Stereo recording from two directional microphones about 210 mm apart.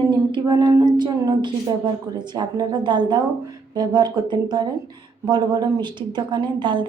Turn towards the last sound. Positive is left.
turn(degrees=-20)  # may be behind; listen again after turning